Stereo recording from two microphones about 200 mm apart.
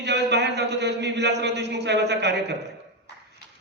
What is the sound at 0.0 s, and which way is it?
Speech, 60° right (ahead or behind).